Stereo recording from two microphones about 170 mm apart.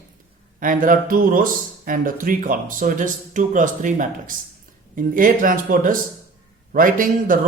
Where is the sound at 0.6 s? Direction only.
55° right (ahead or behind).